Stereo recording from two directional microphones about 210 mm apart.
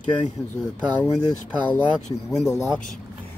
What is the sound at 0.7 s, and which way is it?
Speech, 10° left (ahead or behind).